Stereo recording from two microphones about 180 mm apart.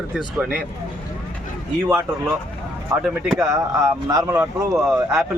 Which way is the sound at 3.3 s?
15° right (ahead or behind).